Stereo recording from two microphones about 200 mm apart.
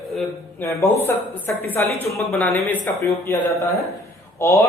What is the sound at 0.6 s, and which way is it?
Speech, 10° left (ahead or behind).